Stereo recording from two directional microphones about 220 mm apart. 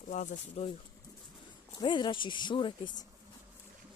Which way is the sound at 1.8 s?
20° left (ahead or behind).